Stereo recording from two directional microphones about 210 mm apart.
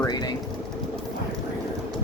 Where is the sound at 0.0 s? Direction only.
20° left (ahead or behind).